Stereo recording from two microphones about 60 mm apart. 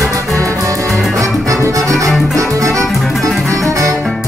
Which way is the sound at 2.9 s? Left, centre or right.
Centre.